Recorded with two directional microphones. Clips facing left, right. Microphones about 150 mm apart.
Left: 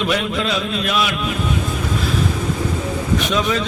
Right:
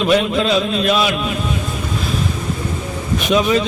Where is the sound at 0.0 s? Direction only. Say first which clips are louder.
Right 5 dB; 25° right (ahead or behind).